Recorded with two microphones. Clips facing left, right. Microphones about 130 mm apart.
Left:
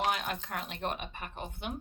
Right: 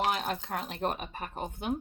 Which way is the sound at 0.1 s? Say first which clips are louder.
Right 2 dB; 35° right (ahead or behind).